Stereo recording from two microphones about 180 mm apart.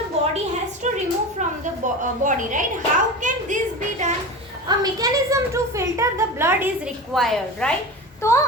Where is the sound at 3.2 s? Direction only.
45° right (ahead or behind).